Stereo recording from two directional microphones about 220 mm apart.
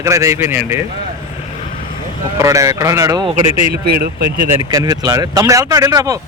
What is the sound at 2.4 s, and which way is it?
Speech, 15° right (ahead or behind).